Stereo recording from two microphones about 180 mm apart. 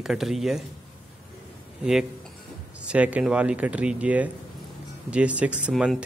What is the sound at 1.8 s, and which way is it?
A man's voice, 5° right (ahead or behind).